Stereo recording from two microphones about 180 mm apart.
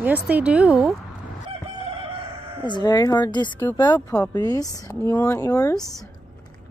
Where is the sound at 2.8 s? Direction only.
20° left (ahead or behind).